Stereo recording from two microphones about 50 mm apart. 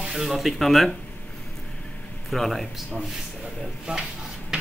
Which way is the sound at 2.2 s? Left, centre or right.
Centre.